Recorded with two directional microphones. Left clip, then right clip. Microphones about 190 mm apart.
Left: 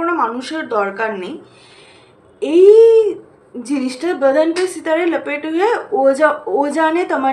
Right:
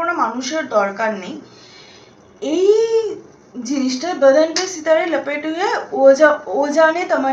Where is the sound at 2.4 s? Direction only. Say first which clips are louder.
Left 7 dB; 40° left (ahead or behind).